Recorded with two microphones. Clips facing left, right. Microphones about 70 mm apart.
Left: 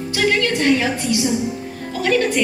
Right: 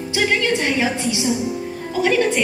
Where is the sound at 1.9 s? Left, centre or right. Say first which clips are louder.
Even; centre.